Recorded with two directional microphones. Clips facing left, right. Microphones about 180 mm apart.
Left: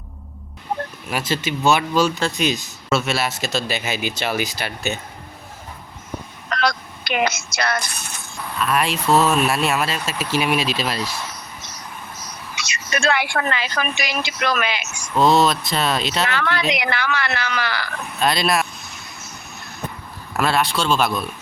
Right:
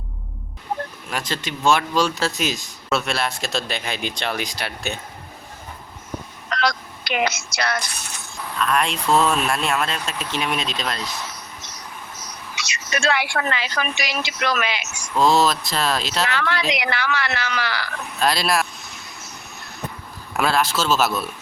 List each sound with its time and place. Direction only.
1.1 s speech: 5° left (ahead or behind)
6.5 s a sound: 55° left (ahead or behind)
8.5 s speech: 5° left (ahead or behind)
12.5 s speech: 55° left (ahead or behind)
15.1 s speech: centre (ahead or behind)
16.3 s a woman's voice: 50° left (ahead or behind)
18.2 s speech: centre (ahead or behind)
20.3 s speech: centre (ahead or behind)